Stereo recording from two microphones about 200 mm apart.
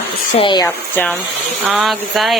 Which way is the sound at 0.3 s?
25° left (ahead or behind).